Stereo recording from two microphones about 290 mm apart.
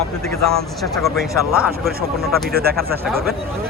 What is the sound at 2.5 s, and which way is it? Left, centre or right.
Speech, right.